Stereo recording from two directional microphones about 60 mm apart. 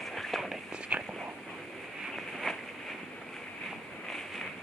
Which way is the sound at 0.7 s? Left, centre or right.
Centre.